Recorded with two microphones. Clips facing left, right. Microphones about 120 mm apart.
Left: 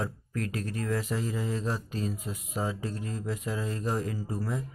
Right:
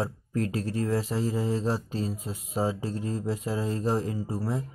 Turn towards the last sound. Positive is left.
turn(degrees=-30)  # may be behind; listen again after turning